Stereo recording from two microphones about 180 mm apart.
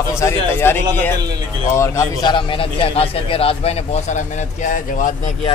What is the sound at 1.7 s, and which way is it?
A man's voice, 15° left (ahead or behind).